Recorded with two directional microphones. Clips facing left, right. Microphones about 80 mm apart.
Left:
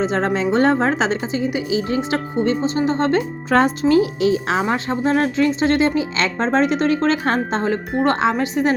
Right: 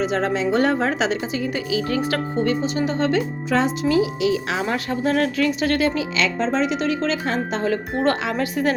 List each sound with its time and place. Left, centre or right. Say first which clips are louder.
0.0 s speech: left 2 dB; left
6.2 s speech: left 3 dB; left
8.0 s speech: left 5 dB; left